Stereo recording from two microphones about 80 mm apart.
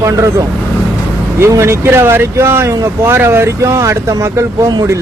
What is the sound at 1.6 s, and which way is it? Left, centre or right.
Speech, right.